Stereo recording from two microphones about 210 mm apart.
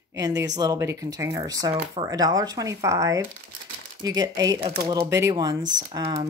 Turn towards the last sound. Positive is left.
turn(degrees=-20)  # may be behind; listen again after turning